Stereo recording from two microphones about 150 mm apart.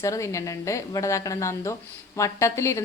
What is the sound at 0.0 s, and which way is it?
A woman's voice, 20° left (ahead or behind).